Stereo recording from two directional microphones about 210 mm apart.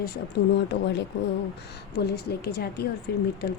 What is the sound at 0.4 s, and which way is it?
Speech, 50° left (ahead or behind).